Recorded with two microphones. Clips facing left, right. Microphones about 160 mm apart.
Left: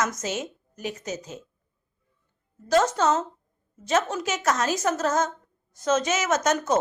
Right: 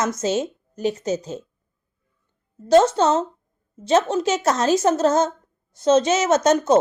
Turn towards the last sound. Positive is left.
turn(degrees=-30)  # may be behind; listen again after turning